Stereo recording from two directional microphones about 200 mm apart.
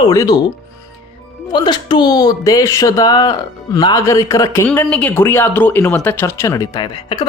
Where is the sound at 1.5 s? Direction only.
20° left (ahead or behind).